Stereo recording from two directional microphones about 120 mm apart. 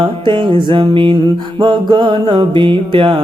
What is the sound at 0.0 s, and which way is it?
Music, 40° right (ahead or behind).